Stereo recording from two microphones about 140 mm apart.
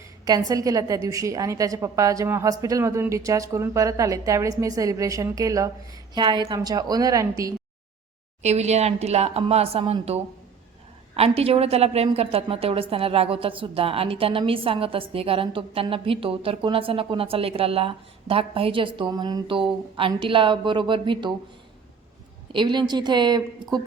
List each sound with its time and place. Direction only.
0.3 s a woman's voice: 25° right (ahead or behind)
8.4 s speech: 50° right (ahead or behind)
11.2 s a woman's voice: 45° right (ahead or behind)
22.5 s a woman's voice: 35° right (ahead or behind)